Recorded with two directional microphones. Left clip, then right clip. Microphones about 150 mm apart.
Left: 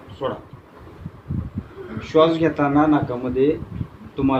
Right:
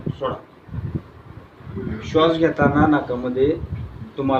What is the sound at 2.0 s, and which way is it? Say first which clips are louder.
Speech: left 1 dB; 55° left (ahead or behind).